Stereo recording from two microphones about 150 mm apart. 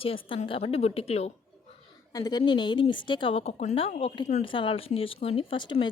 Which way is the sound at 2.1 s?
25° left (ahead or behind).